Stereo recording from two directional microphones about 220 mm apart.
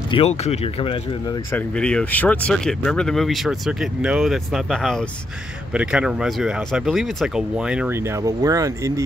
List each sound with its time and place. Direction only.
0.1 s speech: 30° left (ahead or behind)
1.5 s speech: 5° left (ahead or behind); by 9.0 s 15° right (ahead or behind)